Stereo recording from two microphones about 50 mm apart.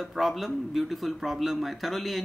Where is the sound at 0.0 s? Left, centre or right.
Centre.